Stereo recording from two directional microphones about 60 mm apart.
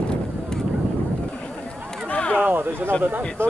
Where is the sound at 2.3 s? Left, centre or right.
Right.